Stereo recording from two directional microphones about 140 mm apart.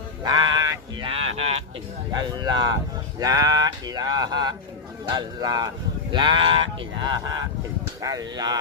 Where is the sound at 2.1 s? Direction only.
30° right (ahead or behind).